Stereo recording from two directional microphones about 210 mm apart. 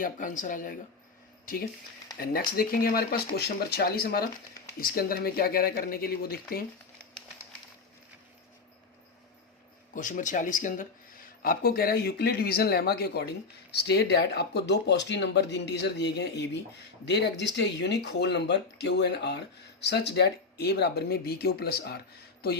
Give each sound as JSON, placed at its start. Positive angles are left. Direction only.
{"t": 0.0, "sound": "speech", "side_deg": 40}
{"t": 2.1, "sound": "speech", "side_deg": 45}
{"t": 9.9, "sound": "speech", "side_deg": 40}